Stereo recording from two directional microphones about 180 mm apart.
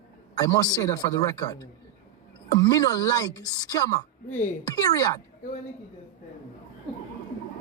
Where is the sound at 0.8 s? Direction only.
20° left (ahead or behind).